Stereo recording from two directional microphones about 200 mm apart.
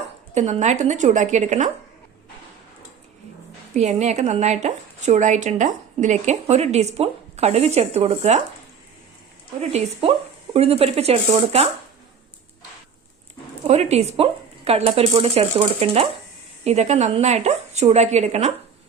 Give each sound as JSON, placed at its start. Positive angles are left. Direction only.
{"t": 0.3, "sound": "speech", "side_deg": -35}
{"t": 3.8, "sound": "speech", "side_deg": -35}
{"t": 9.6, "sound": "speech", "side_deg": -35}
{"t": 13.7, "sound": "speech", "side_deg": -30}